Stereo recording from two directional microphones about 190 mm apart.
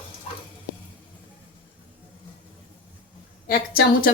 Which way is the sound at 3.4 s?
50° left (ahead or behind).